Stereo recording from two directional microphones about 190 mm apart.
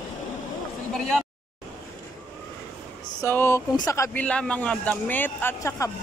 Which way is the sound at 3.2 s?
15° left (ahead or behind).